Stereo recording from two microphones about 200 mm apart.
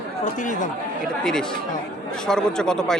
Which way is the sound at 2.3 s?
5° left (ahead or behind).